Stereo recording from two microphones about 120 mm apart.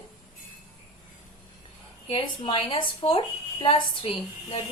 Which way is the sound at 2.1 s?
45° left (ahead or behind).